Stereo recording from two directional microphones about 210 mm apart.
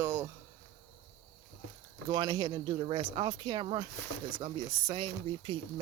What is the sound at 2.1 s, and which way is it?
Speech, 20° right (ahead or behind).